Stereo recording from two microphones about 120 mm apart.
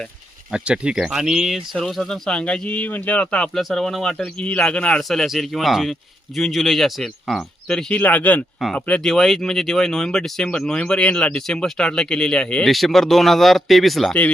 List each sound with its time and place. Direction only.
0.5 s speech: 10° right (ahead or behind)